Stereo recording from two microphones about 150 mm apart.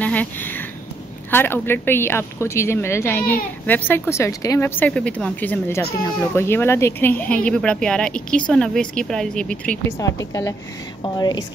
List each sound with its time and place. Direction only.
0.0 s a sound: 10° left (ahead or behind)
1.3 s speech: 15° left (ahead or behind)
9.8 s a woman's voice: 20° left (ahead or behind)